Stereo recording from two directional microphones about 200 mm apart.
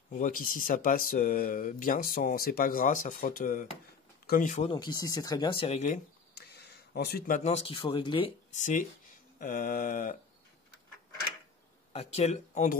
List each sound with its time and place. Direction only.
0.1 s speech: 45° left (ahead or behind)
4.6 s speech: 20° left (ahead or behind)
6.3 s speech: 55° left (ahead or behind); by 8.3 s 25° left (ahead or behind)
8.5 s speech: 35° left (ahead or behind)
11.9 s speech: 30° left (ahead or behind)